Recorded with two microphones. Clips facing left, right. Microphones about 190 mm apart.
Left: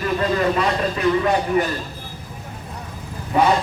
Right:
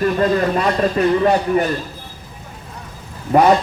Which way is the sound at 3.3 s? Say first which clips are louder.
Right 5 dB; 50° right (ahead or behind).